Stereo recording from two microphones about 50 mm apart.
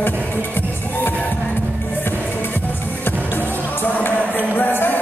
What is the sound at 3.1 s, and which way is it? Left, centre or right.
Music, left.